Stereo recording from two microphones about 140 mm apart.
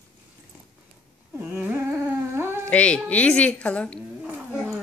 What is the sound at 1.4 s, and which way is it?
Dog, 15° right (ahead or behind).